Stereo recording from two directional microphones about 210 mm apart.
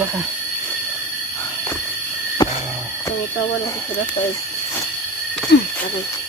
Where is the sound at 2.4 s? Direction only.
20° left (ahead or behind).